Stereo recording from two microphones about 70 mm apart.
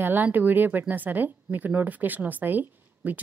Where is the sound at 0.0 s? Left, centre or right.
Right.